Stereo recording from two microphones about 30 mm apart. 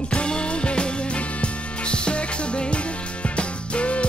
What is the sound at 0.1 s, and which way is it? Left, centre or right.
Music, left.